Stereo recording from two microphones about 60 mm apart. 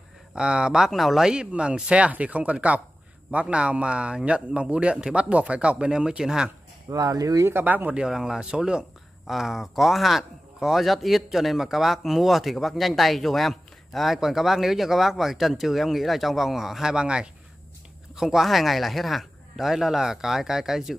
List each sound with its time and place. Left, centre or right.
0.3 s speech: centre
6.9 s speech: right
7.6 s speech: right
7.9 s speech: centre